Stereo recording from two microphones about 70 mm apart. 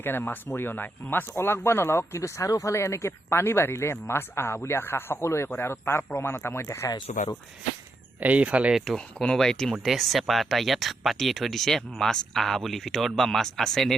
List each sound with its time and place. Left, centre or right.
0.0 s speech: left
8.2 s speech: centre
8.7 s speech: centre
9.1 s speech: centre